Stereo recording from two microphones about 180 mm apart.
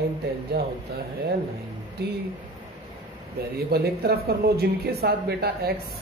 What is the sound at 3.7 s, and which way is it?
Speech, 60° right (ahead or behind).